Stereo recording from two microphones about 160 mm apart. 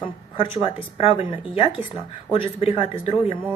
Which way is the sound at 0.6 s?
35° left (ahead or behind).